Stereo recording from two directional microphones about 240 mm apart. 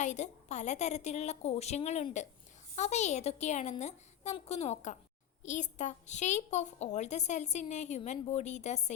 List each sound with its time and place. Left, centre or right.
0.0 s a woman's voice: left